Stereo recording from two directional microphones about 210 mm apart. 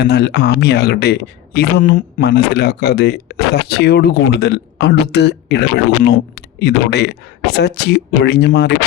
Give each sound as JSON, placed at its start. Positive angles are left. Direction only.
{"t": 0.0, "sound": "speech", "side_deg": 50}